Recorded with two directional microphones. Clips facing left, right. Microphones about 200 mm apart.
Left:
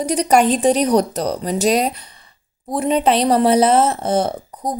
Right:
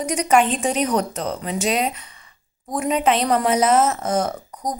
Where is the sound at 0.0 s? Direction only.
35° left (ahead or behind).